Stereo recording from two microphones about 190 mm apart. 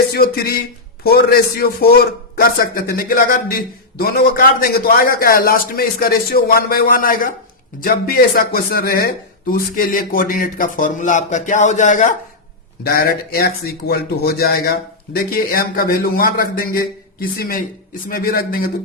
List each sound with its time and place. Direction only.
0.1 s a man's voice: 55° left (ahead or behind)
12.8 s a man's voice: 50° left (ahead or behind)